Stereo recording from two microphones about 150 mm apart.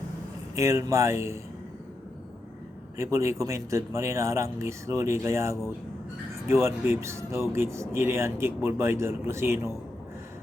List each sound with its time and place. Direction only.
0.5 s speech: 20° right (ahead or behind)
3.0 s speech: 20° right (ahead or behind)